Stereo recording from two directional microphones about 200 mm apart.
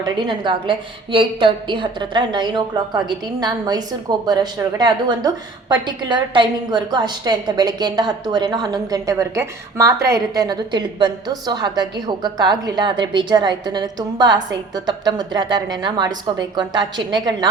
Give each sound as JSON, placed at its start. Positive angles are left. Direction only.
{"t": 0.0, "sound": "a woman's voice", "side_deg": -25}